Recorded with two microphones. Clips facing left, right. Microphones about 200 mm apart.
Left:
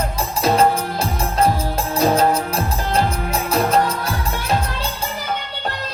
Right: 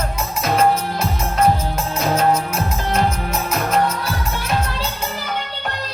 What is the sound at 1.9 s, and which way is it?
Music, 35° left (ahead or behind).